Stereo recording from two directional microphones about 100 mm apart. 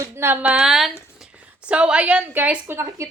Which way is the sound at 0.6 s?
5° right (ahead or behind).